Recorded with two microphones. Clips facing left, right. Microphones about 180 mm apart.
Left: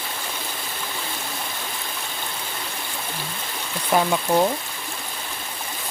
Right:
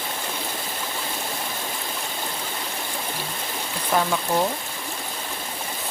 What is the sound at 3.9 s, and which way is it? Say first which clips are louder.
Speech: left 2 dB; 15° left (ahead or behind).